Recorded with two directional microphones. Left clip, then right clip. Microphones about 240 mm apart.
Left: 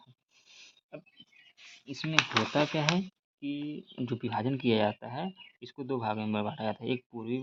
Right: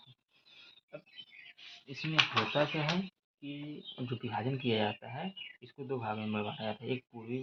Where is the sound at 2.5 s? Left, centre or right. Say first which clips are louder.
Left 3 dB; left.